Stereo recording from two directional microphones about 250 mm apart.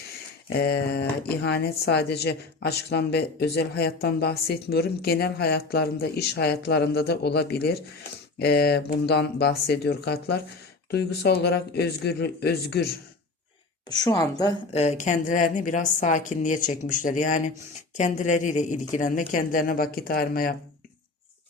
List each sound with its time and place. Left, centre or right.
0.5 s speech: left
14.0 s a woman's voice: centre; by 20.6 s left